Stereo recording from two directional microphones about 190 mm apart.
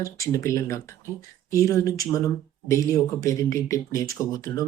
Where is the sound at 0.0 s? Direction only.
15° left (ahead or behind).